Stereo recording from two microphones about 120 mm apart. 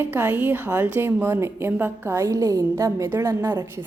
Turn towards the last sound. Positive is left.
turn(degrees=-25)  # may be behind; listen again after turning